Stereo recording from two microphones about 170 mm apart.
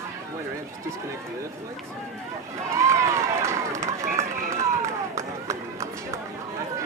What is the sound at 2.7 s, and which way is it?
Run, 15° right (ahead or behind).